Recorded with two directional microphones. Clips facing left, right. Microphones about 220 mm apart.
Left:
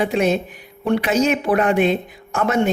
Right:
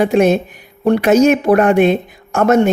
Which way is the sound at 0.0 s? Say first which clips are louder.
Right 6 dB; 45° right (ahead or behind).